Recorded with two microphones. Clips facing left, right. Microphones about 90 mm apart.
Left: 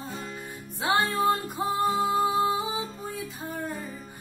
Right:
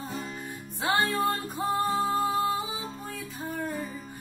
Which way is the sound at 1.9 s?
15° left (ahead or behind).